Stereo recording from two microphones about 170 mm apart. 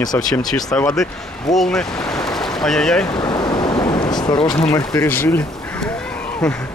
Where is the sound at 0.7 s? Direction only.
5° left (ahead or behind).